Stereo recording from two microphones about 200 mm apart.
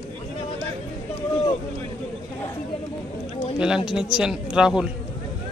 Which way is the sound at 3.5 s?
5° right (ahead or behind).